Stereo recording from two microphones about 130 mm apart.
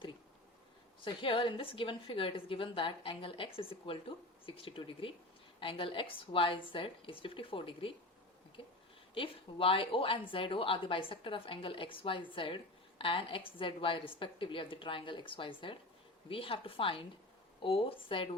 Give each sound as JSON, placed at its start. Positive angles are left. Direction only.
{"t": 1.0, "sound": "a woman's voice", "side_deg": 40}
{"t": 9.1, "sound": "a woman's voice", "side_deg": 45}